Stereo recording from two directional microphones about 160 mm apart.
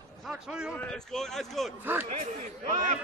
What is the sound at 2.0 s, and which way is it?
Speech, 45° right (ahead or behind).